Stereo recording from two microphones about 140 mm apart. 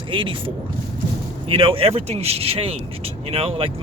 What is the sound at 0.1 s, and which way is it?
Speech, 35° right (ahead or behind).